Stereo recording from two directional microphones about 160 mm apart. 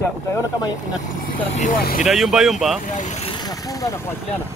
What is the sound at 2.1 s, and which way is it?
Speech, centre (ahead or behind).